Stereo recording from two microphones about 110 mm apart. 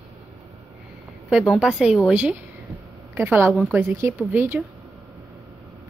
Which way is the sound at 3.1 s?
20° right (ahead or behind).